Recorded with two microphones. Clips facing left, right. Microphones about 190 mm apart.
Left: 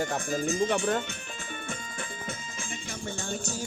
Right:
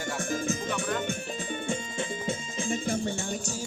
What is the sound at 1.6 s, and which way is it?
Music, 25° right (ahead or behind).